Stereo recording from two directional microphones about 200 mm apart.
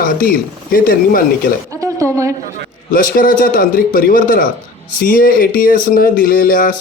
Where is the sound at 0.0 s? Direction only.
45° left (ahead or behind).